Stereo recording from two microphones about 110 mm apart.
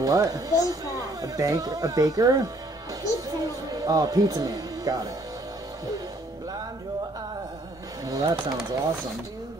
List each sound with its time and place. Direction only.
0.0 s speech: 35° right (ahead or behind)
8.0 s speech: 35° right (ahead or behind)